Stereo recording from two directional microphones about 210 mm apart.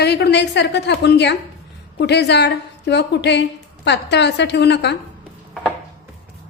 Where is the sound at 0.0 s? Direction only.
50° left (ahead or behind).